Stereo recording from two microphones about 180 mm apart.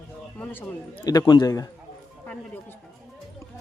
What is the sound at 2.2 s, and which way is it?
Speech, 10° left (ahead or behind).